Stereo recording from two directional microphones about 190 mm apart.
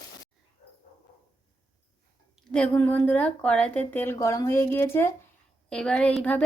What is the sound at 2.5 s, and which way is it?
A woman's voice, 5° left (ahead or behind).